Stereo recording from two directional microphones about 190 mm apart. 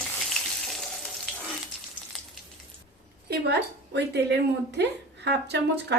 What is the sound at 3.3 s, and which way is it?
Speech, 60° right (ahead or behind).